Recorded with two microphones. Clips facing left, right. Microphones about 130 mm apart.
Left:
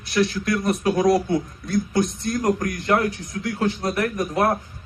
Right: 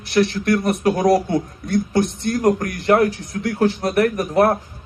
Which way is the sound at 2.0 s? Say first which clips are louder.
Right 3 dB; 65° right (ahead or behind).